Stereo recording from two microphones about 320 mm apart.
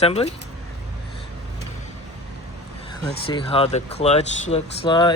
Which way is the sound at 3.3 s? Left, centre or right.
Centre.